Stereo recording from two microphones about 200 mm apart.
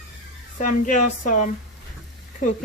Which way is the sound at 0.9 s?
40° left (ahead or behind).